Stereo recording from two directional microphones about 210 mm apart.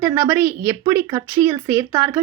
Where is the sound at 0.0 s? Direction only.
10° right (ahead or behind).